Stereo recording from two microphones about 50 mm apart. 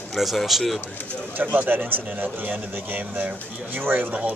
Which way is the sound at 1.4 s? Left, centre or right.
Right.